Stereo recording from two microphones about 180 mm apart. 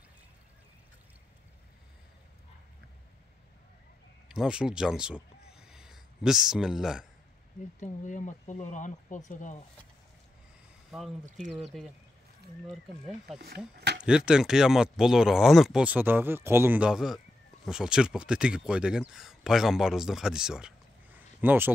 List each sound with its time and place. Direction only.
4.3 s speech: 5° right (ahead or behind)
7.8 s speech: 45° left (ahead or behind)
10.9 s speech: centre (ahead or behind)